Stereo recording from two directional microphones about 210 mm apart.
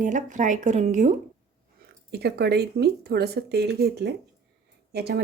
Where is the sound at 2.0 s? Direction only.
50° right (ahead or behind).